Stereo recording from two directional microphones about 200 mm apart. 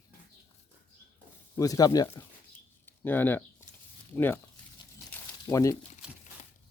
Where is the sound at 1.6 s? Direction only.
20° left (ahead or behind).